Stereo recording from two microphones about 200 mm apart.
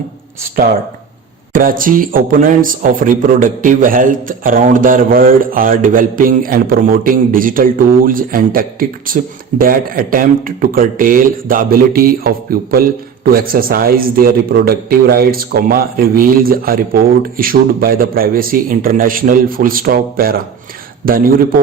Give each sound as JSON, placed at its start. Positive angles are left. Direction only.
{"t": 1.5, "sound": "speech", "side_deg": -45}